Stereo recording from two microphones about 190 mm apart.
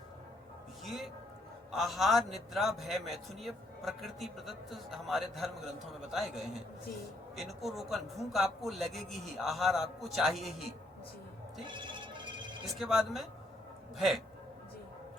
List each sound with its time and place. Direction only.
0.9 s a man's voice: centre (ahead or behind)
11.6 s music: 25° right (ahead or behind)
12.6 s a man's voice: centre (ahead or behind)